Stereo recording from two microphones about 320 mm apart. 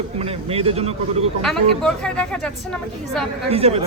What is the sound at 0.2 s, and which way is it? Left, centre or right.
Speech, centre.